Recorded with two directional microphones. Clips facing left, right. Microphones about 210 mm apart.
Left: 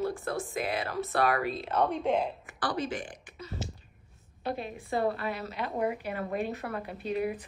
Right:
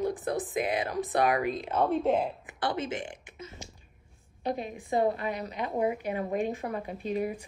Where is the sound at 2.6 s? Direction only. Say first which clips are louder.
Right 1 dB; 25° right (ahead or behind).